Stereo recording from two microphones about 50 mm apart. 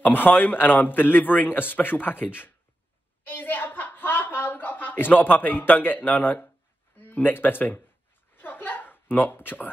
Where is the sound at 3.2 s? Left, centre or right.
Left.